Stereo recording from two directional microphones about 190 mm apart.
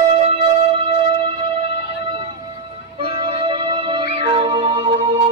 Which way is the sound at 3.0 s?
30° right (ahead or behind).